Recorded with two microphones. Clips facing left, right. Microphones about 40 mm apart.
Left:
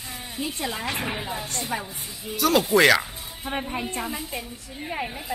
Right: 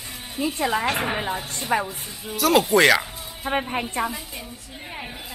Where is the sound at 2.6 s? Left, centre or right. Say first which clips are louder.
Left 1 dB; centre.